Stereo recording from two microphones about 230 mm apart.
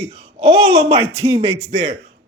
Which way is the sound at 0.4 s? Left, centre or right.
Right.